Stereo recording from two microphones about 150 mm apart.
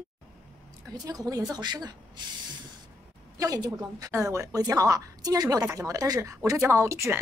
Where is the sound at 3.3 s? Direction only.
25° right (ahead or behind).